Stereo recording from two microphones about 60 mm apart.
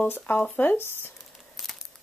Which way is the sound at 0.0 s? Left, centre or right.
Left.